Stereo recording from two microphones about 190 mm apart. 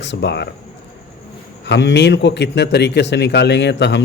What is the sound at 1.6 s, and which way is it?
A man's voice, 70° left (ahead or behind).